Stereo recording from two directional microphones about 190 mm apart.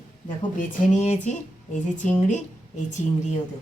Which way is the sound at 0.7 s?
35° left (ahead or behind).